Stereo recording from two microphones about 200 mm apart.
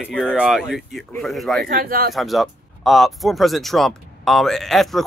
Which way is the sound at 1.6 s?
45° right (ahead or behind).